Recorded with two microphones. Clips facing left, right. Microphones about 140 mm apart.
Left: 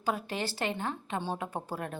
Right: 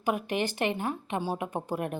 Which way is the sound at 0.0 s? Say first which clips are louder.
Right 4 dB; 15° right (ahead or behind).